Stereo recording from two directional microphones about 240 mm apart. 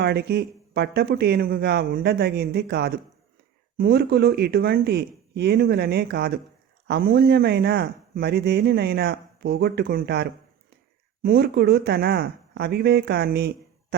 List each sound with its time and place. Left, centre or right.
0.0 s a man's voice: right